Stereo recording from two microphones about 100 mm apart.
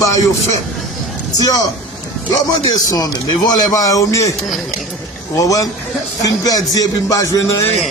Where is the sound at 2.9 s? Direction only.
40° left (ahead or behind).